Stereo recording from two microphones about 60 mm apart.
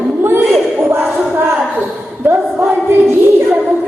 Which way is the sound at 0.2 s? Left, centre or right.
Right.